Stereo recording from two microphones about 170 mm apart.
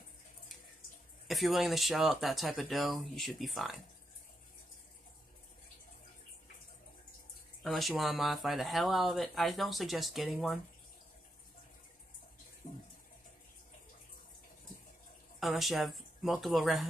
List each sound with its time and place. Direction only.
1.2 s speech: centre (ahead or behind)
7.6 s speech: centre (ahead or behind)
12.6 s water: 50° left (ahead or behind)
15.4 s speech: centre (ahead or behind)